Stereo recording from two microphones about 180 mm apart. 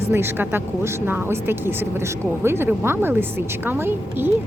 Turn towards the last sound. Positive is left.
turn(degrees=-10)  # may be behind; listen again after turning